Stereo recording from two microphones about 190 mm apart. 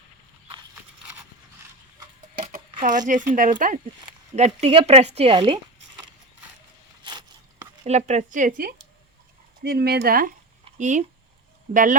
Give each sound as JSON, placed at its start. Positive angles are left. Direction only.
{"t": 3.1, "sound": "speech", "side_deg": -45}
{"t": 7.0, "sound": "a sound", "side_deg": -20}
{"t": 7.9, "sound": "speech", "side_deg": -35}
{"t": 9.6, "sound": "speech", "side_deg": -60}
{"t": 10.8, "sound": "speech", "side_deg": -40}